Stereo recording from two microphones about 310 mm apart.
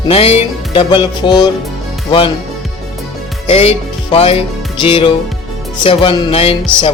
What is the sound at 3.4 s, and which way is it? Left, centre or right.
Music, centre.